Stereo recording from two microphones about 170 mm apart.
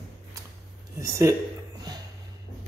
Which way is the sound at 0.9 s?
20° right (ahead or behind).